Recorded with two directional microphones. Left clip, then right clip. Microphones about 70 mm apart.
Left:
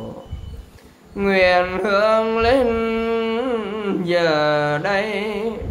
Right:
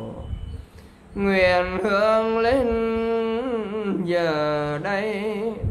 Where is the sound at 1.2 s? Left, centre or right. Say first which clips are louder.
Left 3 dB; right.